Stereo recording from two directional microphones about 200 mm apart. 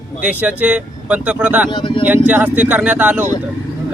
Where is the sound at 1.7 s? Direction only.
25° left (ahead or behind).